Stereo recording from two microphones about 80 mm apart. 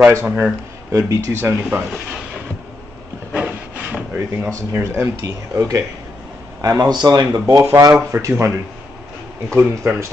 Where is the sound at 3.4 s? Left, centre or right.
Centre.